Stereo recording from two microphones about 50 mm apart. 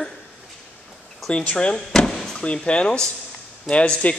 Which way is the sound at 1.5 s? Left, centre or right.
Centre.